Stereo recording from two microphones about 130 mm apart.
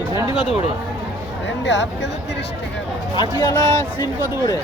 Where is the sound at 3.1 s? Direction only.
30° left (ahead or behind).